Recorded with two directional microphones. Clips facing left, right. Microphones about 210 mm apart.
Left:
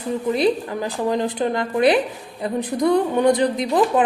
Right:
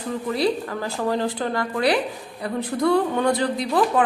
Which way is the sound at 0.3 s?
20° left (ahead or behind).